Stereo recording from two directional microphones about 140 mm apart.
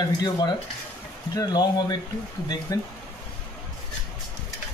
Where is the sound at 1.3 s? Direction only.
30° left (ahead or behind).